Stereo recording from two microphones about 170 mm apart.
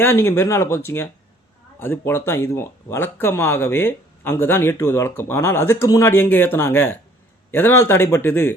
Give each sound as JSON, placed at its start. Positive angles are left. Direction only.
{"t": 0.0, "sound": "speech", "side_deg": 15}